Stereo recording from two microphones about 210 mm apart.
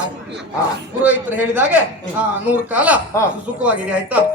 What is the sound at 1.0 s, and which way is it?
A man's voice, 5° right (ahead or behind).